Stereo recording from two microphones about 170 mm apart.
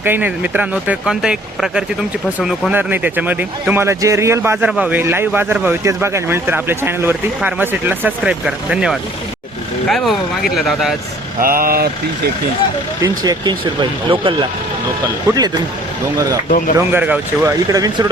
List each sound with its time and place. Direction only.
0.0 s speech: 10° right (ahead or behind)
11.3 s speech: 55° right (ahead or behind)
13.0 s speech: 25° right (ahead or behind)
16.5 s speech: 55° left (ahead or behind)
16.7 s speech: 10° right (ahead or behind)
17.7 s speech: 20° right (ahead or behind)